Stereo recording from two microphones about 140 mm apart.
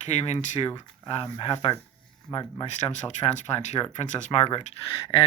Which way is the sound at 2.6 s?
55° left (ahead or behind).